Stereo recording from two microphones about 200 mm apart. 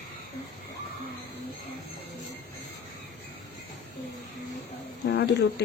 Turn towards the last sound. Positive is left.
turn(degrees=55)  # may be behind; listen again after turning